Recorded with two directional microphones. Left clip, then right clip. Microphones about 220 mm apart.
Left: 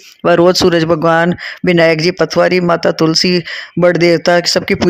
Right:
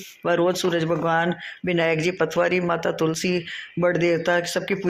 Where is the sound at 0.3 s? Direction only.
50° left (ahead or behind).